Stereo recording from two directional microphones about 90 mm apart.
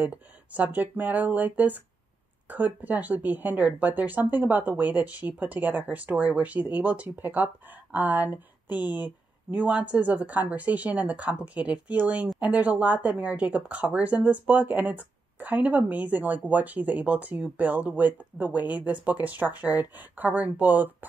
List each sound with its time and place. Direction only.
0.0 s a woman's voice: 15° right (ahead or behind)